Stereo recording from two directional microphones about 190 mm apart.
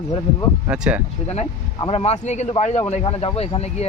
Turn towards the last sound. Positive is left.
turn(degrees=30)  # may be behind; listen again after turning